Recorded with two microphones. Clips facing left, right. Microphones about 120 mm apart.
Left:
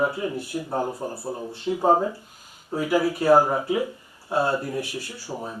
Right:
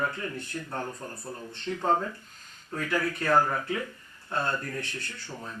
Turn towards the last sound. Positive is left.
turn(degrees=10)  # may be behind; listen again after turning